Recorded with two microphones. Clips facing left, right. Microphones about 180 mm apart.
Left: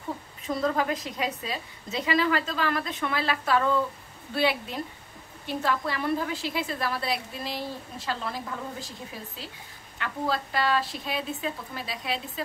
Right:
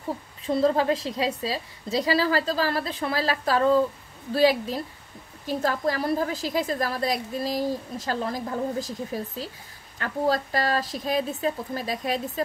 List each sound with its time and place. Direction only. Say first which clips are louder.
0.5 s a woman's voice: right 5 dB; 30° right (ahead or behind)